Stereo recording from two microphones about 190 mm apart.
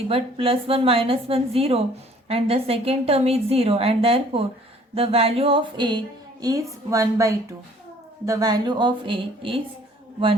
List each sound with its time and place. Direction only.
0.1 s a woman's voice: 30° right (ahead or behind)